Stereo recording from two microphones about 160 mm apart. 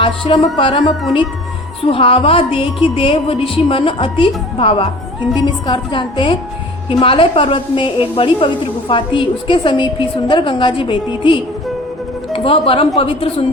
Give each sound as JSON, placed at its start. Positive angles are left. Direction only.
{"t": 0.0, "sound": "a woman's voice", "side_deg": 30}